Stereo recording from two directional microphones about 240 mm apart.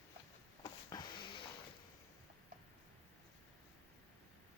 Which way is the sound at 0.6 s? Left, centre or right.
Centre.